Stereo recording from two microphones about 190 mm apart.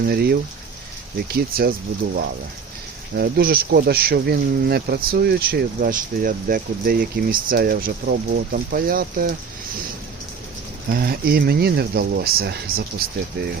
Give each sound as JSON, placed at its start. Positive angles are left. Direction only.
{"t": 0.0, "sound": "speech", "side_deg": -55}
{"t": 3.2, "sound": "speech", "side_deg": -55}
{"t": 10.8, "sound": "speech", "side_deg": -50}